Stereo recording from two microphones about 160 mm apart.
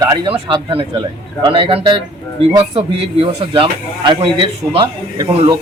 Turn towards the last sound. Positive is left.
turn(degrees=-30)  # may be behind; listen again after turning